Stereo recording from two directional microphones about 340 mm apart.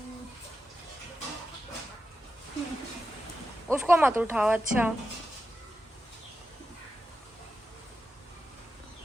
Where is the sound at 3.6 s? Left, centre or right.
Centre.